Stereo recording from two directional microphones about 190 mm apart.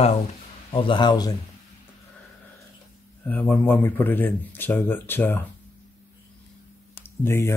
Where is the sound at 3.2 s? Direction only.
10° left (ahead or behind).